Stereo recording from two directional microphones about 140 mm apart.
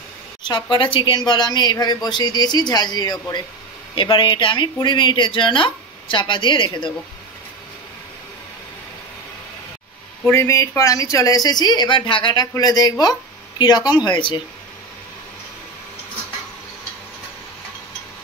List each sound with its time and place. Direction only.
0.4 s speech: 30° left (ahead or behind)
10.2 s speech: 20° left (ahead or behind); by 14.4 s 35° left (ahead or behind)